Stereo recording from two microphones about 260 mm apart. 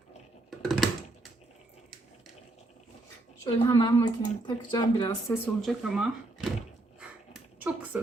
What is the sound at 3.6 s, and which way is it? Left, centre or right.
Speech, centre.